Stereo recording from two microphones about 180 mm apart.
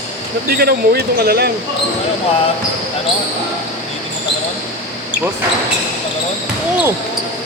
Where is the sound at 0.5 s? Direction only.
60° right (ahead or behind).